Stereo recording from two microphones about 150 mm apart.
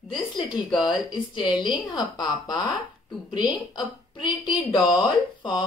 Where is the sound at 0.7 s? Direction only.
30° left (ahead or behind).